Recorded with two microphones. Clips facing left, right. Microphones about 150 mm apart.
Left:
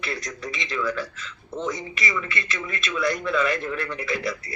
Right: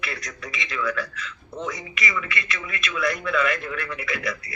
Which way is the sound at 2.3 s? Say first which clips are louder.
Left 1 dB; 30° left (ahead or behind).